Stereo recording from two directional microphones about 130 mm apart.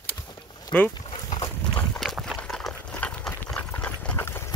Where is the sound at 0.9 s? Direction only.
40° left (ahead or behind).